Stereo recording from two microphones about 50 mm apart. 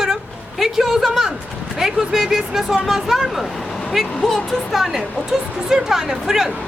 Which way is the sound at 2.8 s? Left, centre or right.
Centre.